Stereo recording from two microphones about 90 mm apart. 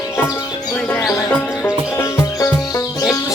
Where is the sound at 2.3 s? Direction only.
35° left (ahead or behind).